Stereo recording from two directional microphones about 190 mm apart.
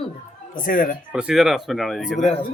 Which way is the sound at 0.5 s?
45° left (ahead or behind).